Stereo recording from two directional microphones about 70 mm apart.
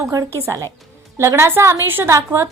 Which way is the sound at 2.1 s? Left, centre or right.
Right.